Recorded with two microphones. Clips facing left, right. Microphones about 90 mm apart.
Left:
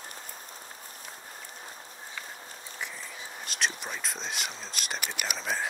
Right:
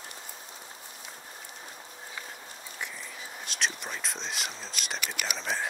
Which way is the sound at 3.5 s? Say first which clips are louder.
Left 1 dB; centre (ahead or behind).